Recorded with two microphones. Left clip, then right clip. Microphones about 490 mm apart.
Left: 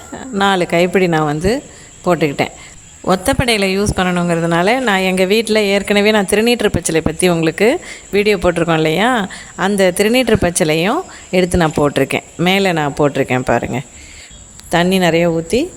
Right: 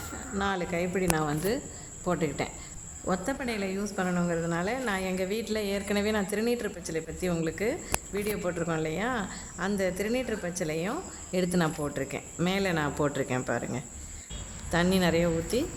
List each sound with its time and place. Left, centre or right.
0.3 s a woman's voice: right